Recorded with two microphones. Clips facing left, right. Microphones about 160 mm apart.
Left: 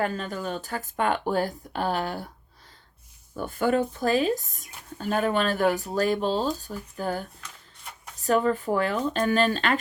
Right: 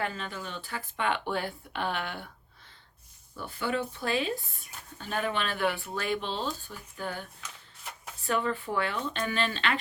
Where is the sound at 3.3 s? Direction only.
45° left (ahead or behind).